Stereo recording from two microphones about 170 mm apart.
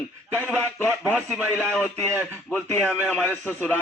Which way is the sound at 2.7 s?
5° left (ahead or behind).